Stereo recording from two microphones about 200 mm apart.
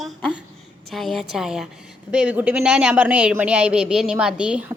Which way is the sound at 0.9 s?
Centre (ahead or behind).